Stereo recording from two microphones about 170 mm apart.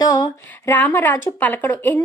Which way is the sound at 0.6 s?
10° left (ahead or behind).